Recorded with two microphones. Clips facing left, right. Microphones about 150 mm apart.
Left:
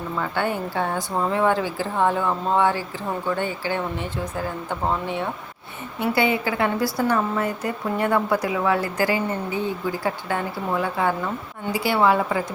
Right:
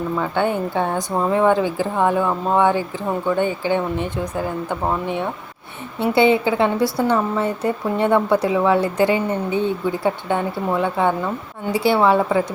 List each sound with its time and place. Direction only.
0.2 s a woman's voice: 20° right (ahead or behind)